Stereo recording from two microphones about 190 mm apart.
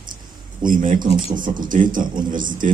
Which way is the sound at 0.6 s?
45° right (ahead or behind).